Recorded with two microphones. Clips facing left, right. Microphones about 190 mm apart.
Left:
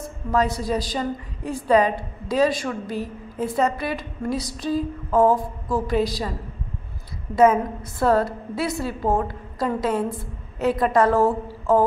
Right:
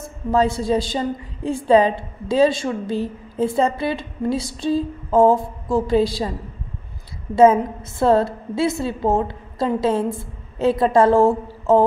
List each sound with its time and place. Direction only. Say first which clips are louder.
0.3 s a woman's voice: right 4 dB; 25° right (ahead or behind)
7.3 s a woman's voice: right 3 dB; 25° right (ahead or behind)